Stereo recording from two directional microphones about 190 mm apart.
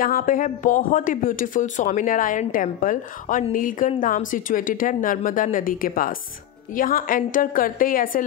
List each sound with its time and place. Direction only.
0.0 s speech: 45° left (ahead or behind)